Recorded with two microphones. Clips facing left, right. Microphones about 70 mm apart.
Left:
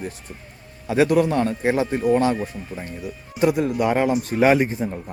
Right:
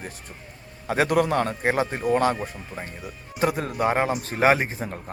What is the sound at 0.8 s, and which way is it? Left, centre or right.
A man's voice, right.